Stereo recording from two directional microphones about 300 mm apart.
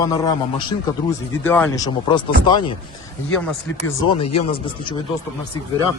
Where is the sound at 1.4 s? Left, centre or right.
Centre.